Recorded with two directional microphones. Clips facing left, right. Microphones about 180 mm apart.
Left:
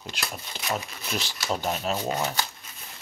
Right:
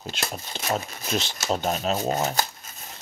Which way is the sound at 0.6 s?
40° right (ahead or behind).